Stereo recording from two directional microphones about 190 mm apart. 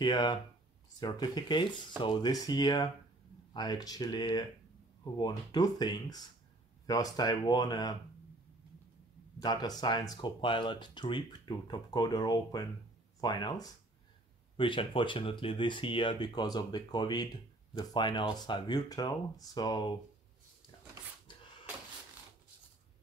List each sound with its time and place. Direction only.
0.0 s speech: 25° left (ahead or behind)
9.4 s speech: 20° left (ahead or behind)
21.3 s cupboard open or close: 25° left (ahead or behind)